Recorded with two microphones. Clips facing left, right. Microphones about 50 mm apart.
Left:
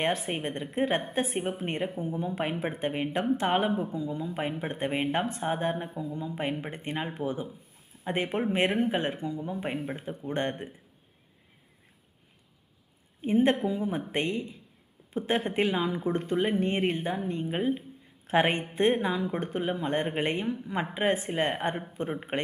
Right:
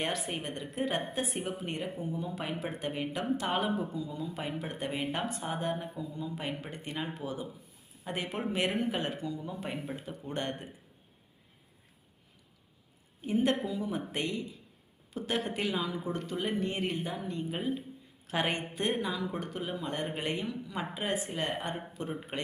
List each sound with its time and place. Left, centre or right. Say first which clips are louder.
0.0 s speech: left 5 dB; left
13.2 s speech: left 5 dB; left